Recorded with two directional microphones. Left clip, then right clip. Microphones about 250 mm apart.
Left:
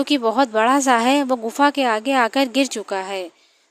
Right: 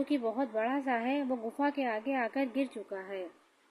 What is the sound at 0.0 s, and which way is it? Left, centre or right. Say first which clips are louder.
Speech: left 15 dB; left.